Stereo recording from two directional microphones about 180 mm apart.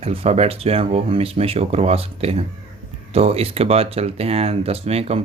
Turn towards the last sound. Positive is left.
turn(degrees=-35)  # may be behind; listen again after turning